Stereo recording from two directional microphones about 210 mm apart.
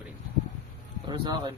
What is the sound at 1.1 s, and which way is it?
Speech, 20° right (ahead or behind).